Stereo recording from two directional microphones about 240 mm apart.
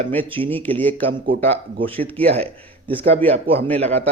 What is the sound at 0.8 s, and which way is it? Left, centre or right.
A man's voice, centre.